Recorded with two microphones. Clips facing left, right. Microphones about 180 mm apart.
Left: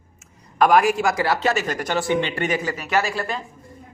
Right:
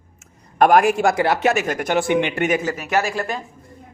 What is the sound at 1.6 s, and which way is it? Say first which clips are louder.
Speech: right 4 dB; 55° right (ahead or behind).